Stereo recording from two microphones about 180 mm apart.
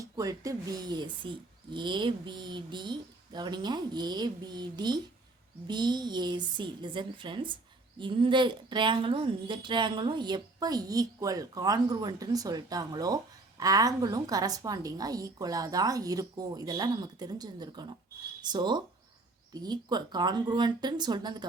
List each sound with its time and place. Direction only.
0.0 s a woman's voice: 20° right (ahead or behind)